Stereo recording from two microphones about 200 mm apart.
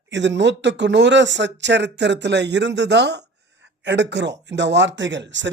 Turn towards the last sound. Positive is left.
turn(degrees=-65)  # may be behind; listen again after turning